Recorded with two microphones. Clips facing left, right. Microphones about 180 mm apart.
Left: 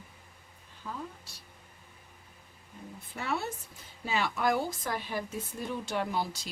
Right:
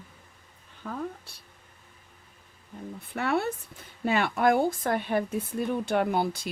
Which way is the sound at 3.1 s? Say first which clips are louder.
Right 7 dB; 60° right (ahead or behind).